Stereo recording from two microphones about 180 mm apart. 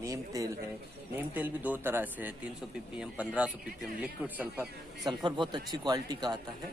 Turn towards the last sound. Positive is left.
turn(degrees=-20)  # may be behind; listen again after turning